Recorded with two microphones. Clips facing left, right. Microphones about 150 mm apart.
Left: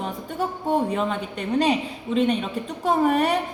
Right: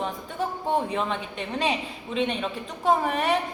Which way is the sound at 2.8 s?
40° left (ahead or behind).